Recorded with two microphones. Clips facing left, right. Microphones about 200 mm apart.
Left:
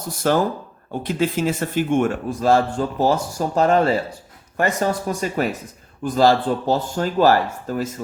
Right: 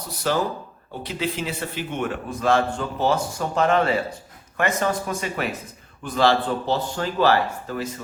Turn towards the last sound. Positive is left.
turn(degrees=40)  # may be behind; listen again after turning